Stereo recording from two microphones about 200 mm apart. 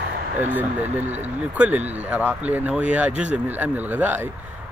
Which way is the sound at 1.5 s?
5° right (ahead or behind).